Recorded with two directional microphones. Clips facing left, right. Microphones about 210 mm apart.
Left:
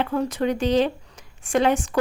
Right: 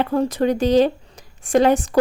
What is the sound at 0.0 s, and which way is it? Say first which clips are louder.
Speech: right 4 dB; 35° right (ahead or behind).